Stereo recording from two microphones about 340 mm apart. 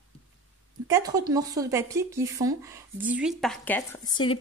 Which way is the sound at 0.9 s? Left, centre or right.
Centre.